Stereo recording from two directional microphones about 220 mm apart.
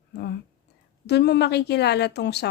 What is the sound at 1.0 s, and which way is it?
Speech, 50° left (ahead or behind).